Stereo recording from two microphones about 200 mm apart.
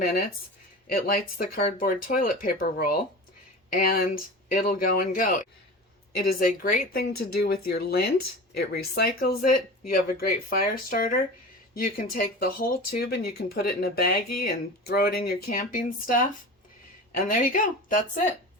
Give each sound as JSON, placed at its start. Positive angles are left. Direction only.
{"t": 0.0, "sound": "speech", "side_deg": 50}
{"t": 1.5, "sound": "speech", "side_deg": 45}